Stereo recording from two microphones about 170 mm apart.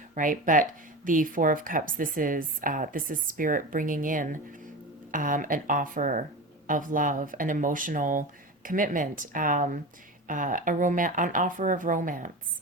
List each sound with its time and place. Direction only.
0.1 s speech: 50° right (ahead or behind)